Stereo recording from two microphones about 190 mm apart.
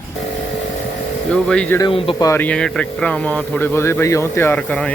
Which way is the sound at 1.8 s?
25° left (ahead or behind).